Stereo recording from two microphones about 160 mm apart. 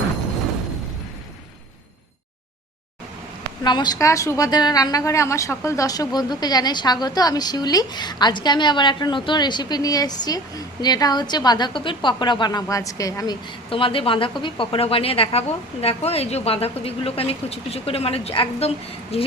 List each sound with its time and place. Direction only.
3.6 s a woman's voice: 25° left (ahead or behind)
13.7 s a woman's voice: 35° left (ahead or behind)